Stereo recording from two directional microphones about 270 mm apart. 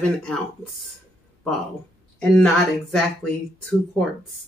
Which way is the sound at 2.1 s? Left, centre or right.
Centre.